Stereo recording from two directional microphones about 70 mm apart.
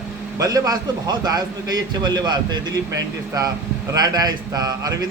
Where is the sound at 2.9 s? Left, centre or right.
Right.